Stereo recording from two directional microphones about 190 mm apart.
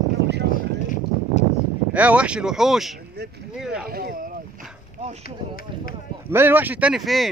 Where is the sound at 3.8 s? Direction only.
50° right (ahead or behind).